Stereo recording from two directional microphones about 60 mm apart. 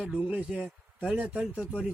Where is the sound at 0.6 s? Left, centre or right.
Centre.